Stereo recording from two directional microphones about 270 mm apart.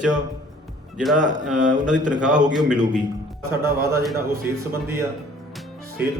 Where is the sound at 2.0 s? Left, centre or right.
Centre.